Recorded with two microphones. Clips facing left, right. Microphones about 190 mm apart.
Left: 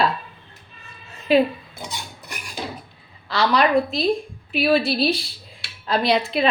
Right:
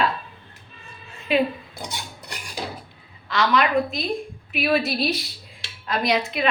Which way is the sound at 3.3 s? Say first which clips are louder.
Left 2 dB; 35° left (ahead or behind).